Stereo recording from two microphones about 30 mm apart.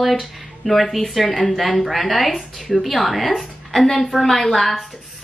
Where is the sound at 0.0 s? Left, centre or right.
Centre.